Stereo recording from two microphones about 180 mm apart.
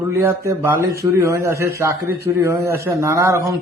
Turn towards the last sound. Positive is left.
turn(degrees=-15)  # may be behind; listen again after turning